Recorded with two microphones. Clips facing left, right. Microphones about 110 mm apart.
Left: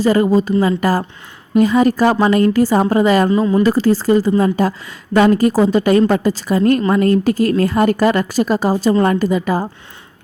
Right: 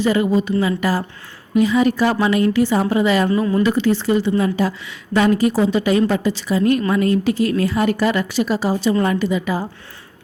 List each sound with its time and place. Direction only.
0.0 s a woman's voice: 40° left (ahead or behind)
3.2 s speech: 20° left (ahead or behind)
3.6 s a woman's voice: 40° left (ahead or behind)